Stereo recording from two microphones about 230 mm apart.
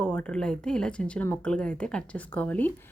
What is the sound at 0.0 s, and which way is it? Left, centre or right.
Speech, centre.